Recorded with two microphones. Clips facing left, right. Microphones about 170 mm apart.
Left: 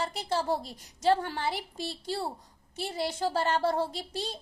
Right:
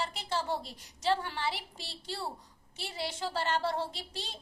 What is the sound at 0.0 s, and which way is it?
A woman's voice, 40° left (ahead or behind).